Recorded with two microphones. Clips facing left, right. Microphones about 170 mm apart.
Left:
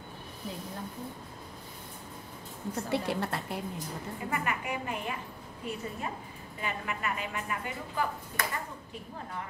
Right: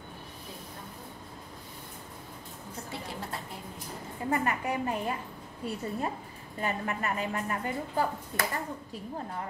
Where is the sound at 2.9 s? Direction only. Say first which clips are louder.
Left 8 dB; 70° left (ahead or behind).